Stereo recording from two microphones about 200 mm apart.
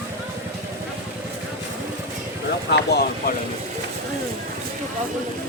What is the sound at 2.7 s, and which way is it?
Vehicle, 50° left (ahead or behind).